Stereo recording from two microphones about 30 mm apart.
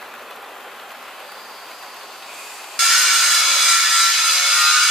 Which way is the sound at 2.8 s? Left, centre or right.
Centre.